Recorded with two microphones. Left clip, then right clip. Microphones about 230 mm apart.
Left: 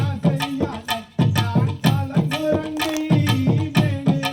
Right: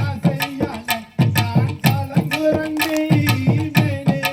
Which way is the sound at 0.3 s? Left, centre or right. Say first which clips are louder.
Right 1 dB; right.